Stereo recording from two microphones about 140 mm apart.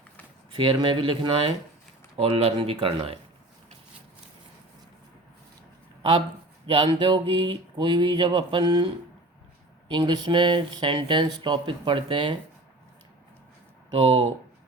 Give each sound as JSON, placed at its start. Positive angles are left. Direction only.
{"t": 0.5, "sound": "speech", "side_deg": -30}
{"t": 6.0, "sound": "speech", "side_deg": -35}
{"t": 9.9, "sound": "speech", "side_deg": -35}
{"t": 13.9, "sound": "speech", "side_deg": -35}